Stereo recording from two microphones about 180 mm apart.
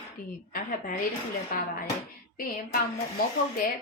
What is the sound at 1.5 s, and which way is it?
Speech, 55° left (ahead or behind).